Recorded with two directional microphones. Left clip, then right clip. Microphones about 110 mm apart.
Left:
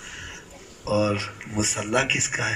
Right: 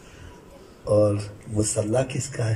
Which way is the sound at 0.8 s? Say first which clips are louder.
Right 3 dB; 35° right (ahead or behind).